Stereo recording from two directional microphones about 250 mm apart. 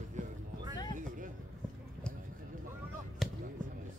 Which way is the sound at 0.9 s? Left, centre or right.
Right.